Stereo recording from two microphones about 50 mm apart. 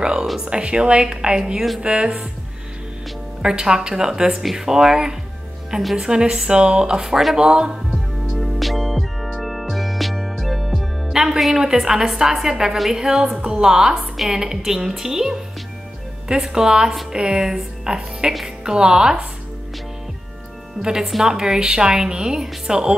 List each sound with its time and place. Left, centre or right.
0.0 s a sound: centre
0.5 s a woman's voice: right
3.4 s speech: centre
7.3 s speech: centre
7.9 s music: centre
16.3 s speech: centre
20.8 s speech: centre